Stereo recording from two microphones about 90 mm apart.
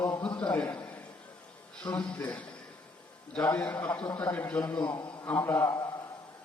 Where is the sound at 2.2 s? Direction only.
15° left (ahead or behind).